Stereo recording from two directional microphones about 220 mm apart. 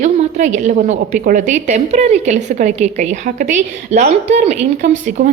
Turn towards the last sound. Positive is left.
turn(degrees=-35)  # may be behind; listen again after turning